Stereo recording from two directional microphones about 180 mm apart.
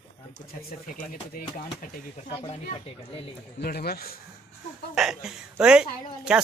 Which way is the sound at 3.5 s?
60° left (ahead or behind).